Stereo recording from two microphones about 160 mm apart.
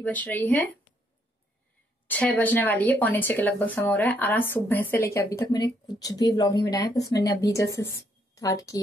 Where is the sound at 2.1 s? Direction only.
10° left (ahead or behind).